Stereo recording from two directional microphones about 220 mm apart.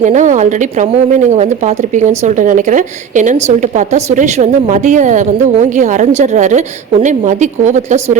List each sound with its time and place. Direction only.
0.0 s a woman's voice: 35° right (ahead or behind)